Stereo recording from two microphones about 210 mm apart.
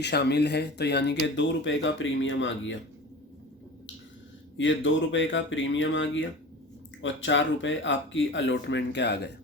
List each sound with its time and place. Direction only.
0.0 s speech: 50° left (ahead or behind)
4.5 s speech: 60° left (ahead or behind)